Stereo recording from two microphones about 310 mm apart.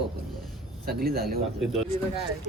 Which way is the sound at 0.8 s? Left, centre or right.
Right.